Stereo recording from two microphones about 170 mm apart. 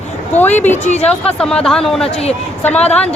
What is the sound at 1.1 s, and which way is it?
Speech, 5° left (ahead or behind).